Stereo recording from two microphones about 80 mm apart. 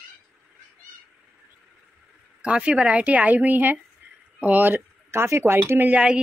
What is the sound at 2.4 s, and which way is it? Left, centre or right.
Speech, centre.